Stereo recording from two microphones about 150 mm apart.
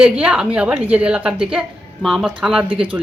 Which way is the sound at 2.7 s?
35° right (ahead or behind).